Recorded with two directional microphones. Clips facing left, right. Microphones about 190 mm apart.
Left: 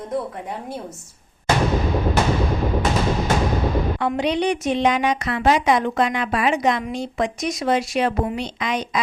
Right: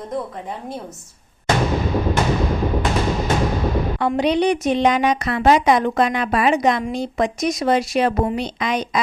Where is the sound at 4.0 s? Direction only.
40° right (ahead or behind).